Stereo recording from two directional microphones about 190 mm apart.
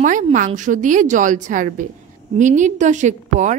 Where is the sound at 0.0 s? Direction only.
40° right (ahead or behind).